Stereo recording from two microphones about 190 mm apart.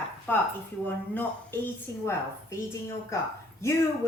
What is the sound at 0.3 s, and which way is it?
Speech, 10° left (ahead or behind).